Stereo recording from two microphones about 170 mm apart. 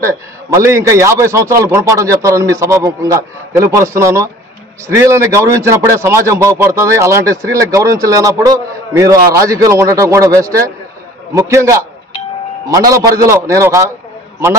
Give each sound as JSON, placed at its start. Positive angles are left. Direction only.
{"t": 0.0, "sound": "a man's voice", "side_deg": -15}